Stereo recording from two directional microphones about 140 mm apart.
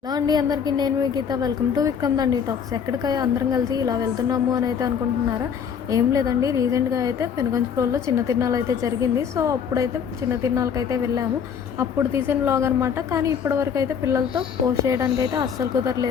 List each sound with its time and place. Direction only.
0.1 s a woman's voice: 30° right (ahead or behind)
5.9 s a woman's voice: 25° right (ahead or behind)